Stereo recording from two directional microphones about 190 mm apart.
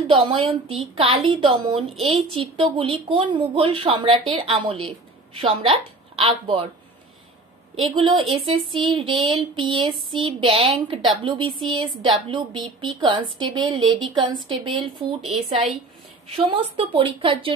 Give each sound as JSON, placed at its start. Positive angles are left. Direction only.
{"t": 0.0, "sound": "a woman's voice", "side_deg": -30}
{"t": 7.7, "sound": "a woman's voice", "side_deg": -25}
{"t": 15.2, "sound": "a woman's voice", "side_deg": 0}
{"t": 16.3, "sound": "a woman's voice", "side_deg": -30}